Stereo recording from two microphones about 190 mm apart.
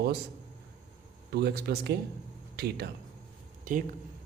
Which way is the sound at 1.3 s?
55° right (ahead or behind).